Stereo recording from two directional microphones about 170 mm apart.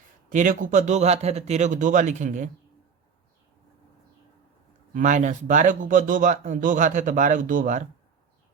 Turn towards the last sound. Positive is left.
turn(degrees=-50)  # may be behind; listen again after turning